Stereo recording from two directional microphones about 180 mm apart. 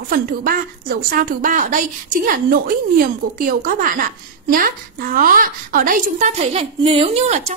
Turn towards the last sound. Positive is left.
turn(degrees=-40)  # may be behind; listen again after turning